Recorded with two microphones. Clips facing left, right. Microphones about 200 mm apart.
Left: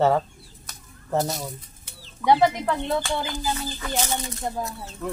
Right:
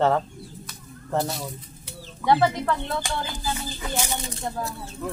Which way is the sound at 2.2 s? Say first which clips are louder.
Left 1 dB; 15° left (ahead or behind).